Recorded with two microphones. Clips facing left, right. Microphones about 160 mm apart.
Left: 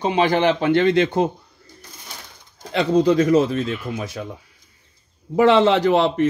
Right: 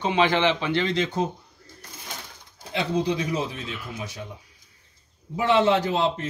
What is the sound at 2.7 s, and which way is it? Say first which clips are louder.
A man's voice: left 8 dB; 90° left.